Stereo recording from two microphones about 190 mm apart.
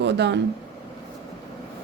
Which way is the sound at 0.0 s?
65° right (ahead or behind).